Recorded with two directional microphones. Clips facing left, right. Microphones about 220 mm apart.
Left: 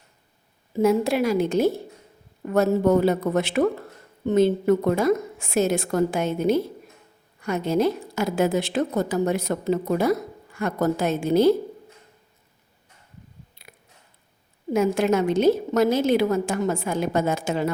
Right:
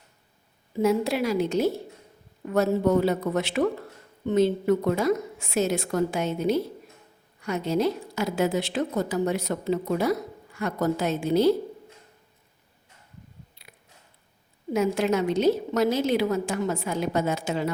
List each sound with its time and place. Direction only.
0.8 s a woman's voice: 50° left (ahead or behind)
14.7 s a woman's voice: 50° left (ahead or behind)